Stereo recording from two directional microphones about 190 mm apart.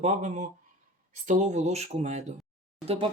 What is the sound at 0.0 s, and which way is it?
Speech, 40° right (ahead or behind).